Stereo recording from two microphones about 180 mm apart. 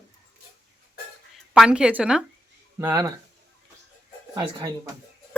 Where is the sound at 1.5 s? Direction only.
5° right (ahead or behind).